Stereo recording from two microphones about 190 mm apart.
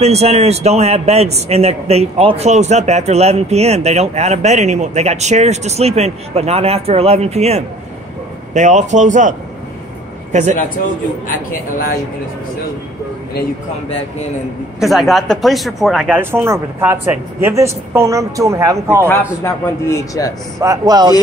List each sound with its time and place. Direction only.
0.0 s a man's voice: 35° right (ahead or behind)
14.8 s speech: centre (ahead or behind)
19.4 s speech: 15° left (ahead or behind)
20.6 s speech: 20° right (ahead or behind)